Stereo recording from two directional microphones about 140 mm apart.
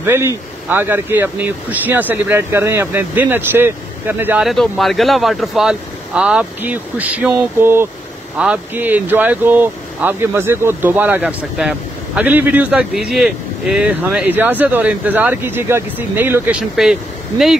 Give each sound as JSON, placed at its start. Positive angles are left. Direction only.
{"t": 0.0, "sound": "a man's voice", "side_deg": -20}
{"t": 4.5, "sound": "speech", "side_deg": 0}